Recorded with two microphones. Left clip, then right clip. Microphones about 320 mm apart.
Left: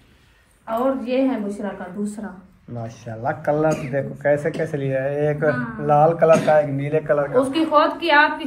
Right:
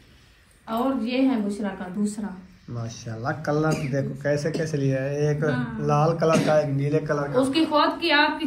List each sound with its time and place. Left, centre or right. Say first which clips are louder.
0.7 s speech: left 5 dB; centre
2.7 s speech: left 4 dB; centre